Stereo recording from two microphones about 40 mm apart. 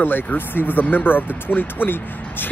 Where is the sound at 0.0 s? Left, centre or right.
Left.